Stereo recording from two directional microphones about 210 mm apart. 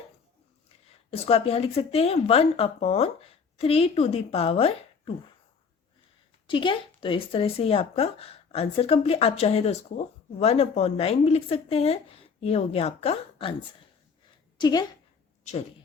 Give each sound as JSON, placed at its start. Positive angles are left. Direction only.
{"t": 0.9, "sound": "speech", "side_deg": 30}
{"t": 6.5, "sound": "speech", "side_deg": 25}
{"t": 14.6, "sound": "a woman's voice", "side_deg": 20}